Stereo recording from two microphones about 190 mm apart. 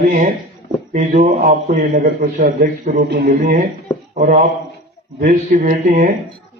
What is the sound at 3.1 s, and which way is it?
Speech, 65° right (ahead or behind).